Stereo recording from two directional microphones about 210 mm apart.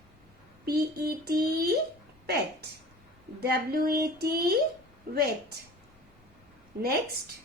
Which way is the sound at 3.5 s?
45° right (ahead or behind).